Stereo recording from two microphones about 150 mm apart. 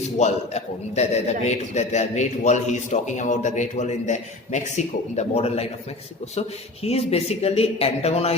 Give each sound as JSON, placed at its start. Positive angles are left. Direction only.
{"t": 0.2, "sound": "a man's voice", "side_deg": 50}
{"t": 6.8, "sound": "a man's voice", "side_deg": 45}